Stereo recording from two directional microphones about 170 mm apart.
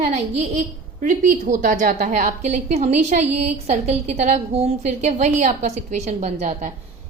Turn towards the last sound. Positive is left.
turn(degrees=-45)  # may be behind; listen again after turning